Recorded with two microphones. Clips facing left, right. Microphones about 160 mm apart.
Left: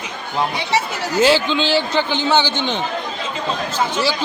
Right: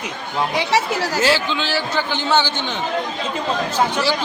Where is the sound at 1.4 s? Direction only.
20° left (ahead or behind).